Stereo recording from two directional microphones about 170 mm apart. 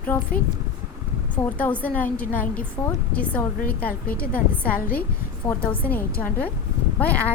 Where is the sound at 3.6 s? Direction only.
60° left (ahead or behind).